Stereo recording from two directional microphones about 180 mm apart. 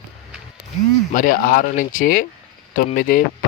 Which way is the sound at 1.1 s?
50° left (ahead or behind).